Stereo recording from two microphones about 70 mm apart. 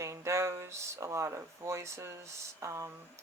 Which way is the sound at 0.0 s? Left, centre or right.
Right.